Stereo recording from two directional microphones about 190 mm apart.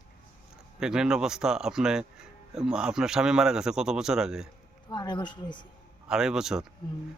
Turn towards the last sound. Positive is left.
turn(degrees=-5)  # may be behind; listen again after turning